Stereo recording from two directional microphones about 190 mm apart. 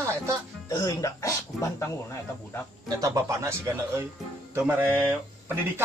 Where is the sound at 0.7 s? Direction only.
20° left (ahead or behind).